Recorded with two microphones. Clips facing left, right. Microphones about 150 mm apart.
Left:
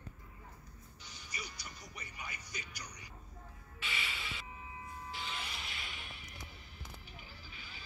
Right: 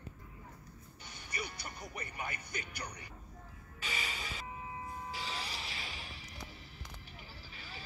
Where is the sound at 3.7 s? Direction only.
40° right (ahead or behind).